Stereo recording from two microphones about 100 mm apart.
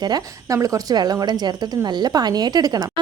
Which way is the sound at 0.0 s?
40° right (ahead or behind).